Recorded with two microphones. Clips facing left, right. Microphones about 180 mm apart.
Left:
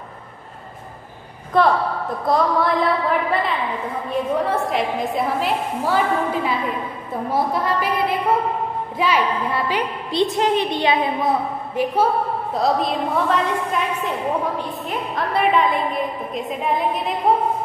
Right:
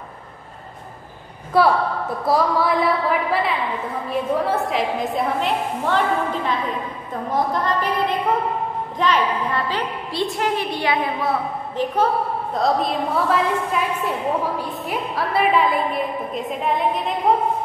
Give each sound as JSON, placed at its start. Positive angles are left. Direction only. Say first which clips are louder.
{"t": 1.5, "sound": "a woman's voice", "louder": "even", "side_deg": -5}